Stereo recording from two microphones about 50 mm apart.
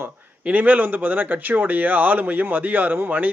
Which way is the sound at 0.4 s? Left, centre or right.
Right.